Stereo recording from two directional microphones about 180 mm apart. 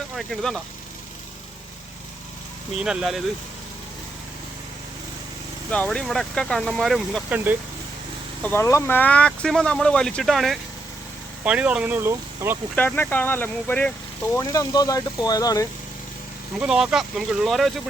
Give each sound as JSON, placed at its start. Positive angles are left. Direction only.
{"t": 0.2, "sound": "speech", "side_deg": 0}
{"t": 2.7, "sound": "speech", "side_deg": -5}
{"t": 5.7, "sound": "speech", "side_deg": 5}
{"t": 8.4, "sound": "speech", "side_deg": 15}
{"t": 12.7, "sound": "speech", "side_deg": 10}
{"t": 14.3, "sound": "speech", "side_deg": 20}
{"t": 16.6, "sound": "speech", "side_deg": -5}